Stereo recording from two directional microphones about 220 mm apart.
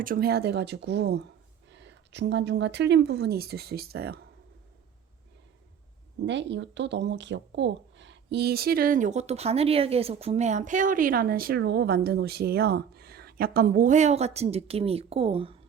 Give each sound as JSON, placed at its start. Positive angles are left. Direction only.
{"t": 0.0, "sound": "speech", "side_deg": -40}
{"t": 6.2, "sound": "speech", "side_deg": -55}